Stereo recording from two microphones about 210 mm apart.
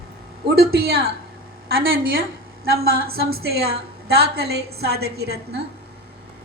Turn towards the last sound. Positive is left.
turn(degrees=-50)  # may be behind; listen again after turning